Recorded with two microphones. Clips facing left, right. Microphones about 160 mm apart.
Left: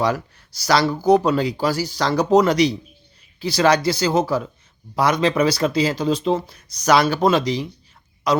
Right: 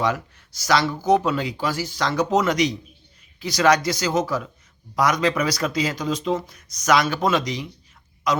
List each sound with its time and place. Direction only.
0.0 s speech: 35° left (ahead or behind)